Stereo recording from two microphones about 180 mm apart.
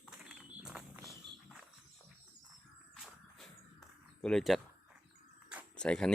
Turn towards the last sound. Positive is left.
turn(degrees=5)  # may be behind; listen again after turning